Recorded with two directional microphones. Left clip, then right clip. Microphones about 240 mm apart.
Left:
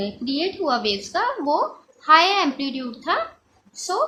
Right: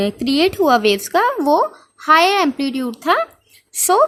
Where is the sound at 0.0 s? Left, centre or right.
Right.